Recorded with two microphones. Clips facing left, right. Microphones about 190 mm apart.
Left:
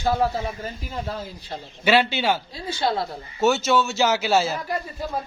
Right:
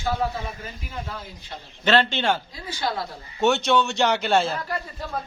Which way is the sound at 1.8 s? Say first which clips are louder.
Left 1 dB; 10° left (ahead or behind).